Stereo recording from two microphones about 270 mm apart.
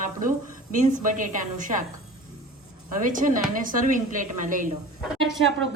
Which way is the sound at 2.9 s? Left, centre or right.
Right.